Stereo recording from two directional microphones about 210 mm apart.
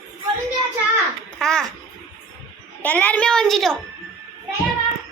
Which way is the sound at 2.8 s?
5° left (ahead or behind).